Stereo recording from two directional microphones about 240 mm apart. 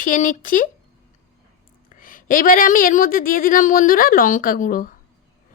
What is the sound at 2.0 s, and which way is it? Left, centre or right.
A woman's voice, left.